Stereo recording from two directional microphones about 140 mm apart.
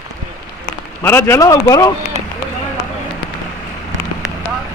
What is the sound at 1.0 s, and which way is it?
Speech, 15° left (ahead or behind).